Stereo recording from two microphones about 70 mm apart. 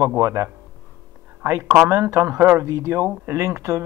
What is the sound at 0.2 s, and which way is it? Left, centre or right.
Speech, right.